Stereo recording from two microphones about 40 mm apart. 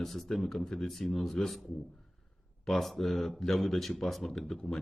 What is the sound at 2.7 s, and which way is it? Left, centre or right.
Speech, centre.